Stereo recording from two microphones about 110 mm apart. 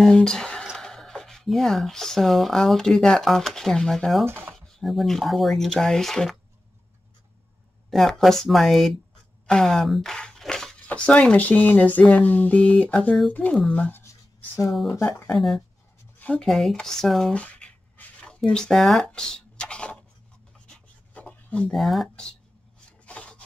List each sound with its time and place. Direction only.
0.0 s speech: 5° left (ahead or behind)
4.3 s speech: 20° right (ahead or behind)
4.6 s speech: centre (ahead or behind)
7.9 s speech: centre (ahead or behind)
14.7 s speech: centre (ahead or behind)
16.2 s a sound: 10° left (ahead or behind)
16.4 s writing: centre (ahead or behind)
21.7 s speech: centre (ahead or behind)
23.0 s filing: 10° left (ahead or behind)